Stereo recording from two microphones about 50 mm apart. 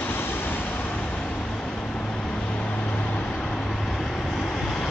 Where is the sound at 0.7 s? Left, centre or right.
Left.